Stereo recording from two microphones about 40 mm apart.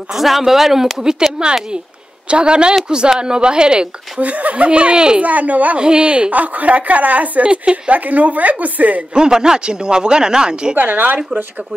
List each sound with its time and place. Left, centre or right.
0.1 s speech: centre
1.4 s speech: right
4.2 s a woman's voice: right
5.2 s a woman's voice: right
5.8 s a woman's voice: right
7.4 s speech: right
7.9 s a woman's voice: right
9.1 s speech: centre
10.8 s speech: right